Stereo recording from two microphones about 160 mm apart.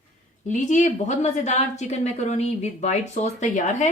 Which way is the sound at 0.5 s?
50° left (ahead or behind).